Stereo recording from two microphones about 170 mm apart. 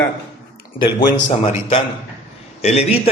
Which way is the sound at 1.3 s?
35° left (ahead or behind).